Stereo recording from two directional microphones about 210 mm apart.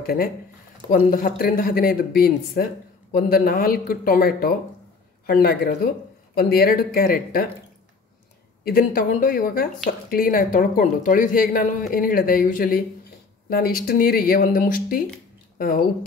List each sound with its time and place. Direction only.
0.0 s speech: 45° left (ahead or behind)
8.6 s a woman's voice: 45° left (ahead or behind)
15.5 s a sound: 45° left (ahead or behind)